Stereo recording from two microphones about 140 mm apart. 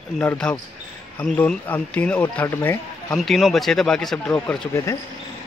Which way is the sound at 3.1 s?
Centre (ahead or behind).